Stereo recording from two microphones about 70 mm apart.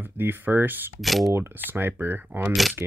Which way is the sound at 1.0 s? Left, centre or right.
Centre.